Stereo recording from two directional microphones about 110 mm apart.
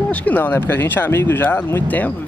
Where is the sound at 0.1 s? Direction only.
15° left (ahead or behind).